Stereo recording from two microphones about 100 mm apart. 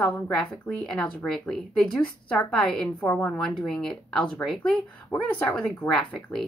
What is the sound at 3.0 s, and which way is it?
Speech, 15° left (ahead or behind).